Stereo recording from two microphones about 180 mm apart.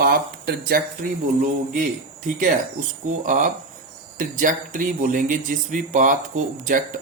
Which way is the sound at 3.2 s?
45° right (ahead or behind).